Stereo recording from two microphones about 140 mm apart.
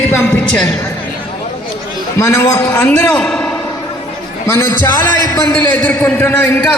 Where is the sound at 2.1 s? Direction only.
20° left (ahead or behind).